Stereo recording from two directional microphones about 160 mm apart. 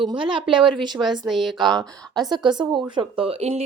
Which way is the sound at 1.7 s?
25° right (ahead or behind).